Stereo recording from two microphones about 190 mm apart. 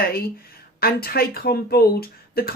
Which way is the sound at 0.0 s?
55° left (ahead or behind).